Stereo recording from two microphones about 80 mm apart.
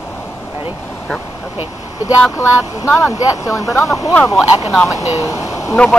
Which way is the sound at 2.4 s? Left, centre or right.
Left.